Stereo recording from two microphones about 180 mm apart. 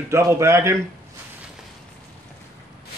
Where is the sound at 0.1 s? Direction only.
15° right (ahead or behind).